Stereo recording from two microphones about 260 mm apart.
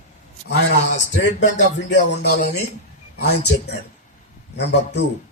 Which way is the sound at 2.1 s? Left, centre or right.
Left.